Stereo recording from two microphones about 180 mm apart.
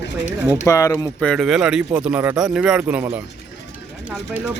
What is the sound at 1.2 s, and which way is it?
Speech, centre (ahead or behind).